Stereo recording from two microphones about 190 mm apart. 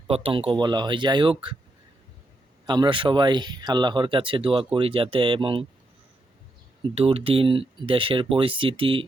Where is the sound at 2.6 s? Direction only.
25° right (ahead or behind).